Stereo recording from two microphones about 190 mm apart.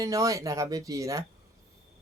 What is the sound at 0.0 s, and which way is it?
Speech, 15° right (ahead or behind).